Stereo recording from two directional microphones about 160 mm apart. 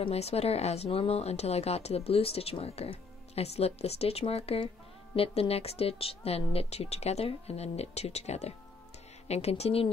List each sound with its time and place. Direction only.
0.0 s speech: 40° left (ahead or behind)